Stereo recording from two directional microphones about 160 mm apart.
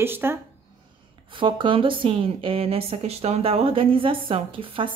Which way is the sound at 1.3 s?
30° right (ahead or behind).